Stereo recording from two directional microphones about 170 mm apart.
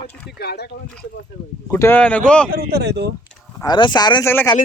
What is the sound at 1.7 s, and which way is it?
Speech, 10° left (ahead or behind).